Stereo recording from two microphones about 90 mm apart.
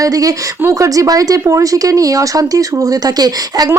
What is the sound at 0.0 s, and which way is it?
Speech, 40° right (ahead or behind).